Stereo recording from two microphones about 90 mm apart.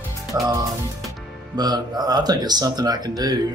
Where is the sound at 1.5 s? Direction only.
50° right (ahead or behind).